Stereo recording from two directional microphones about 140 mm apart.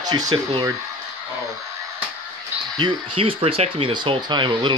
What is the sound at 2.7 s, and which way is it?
Speech, 35° right (ahead or behind).